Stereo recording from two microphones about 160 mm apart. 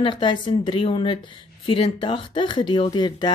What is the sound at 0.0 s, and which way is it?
A woman's voice, 30° left (ahead or behind).